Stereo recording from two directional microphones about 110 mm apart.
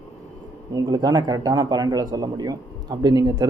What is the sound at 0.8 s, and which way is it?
Speech, 35° right (ahead or behind).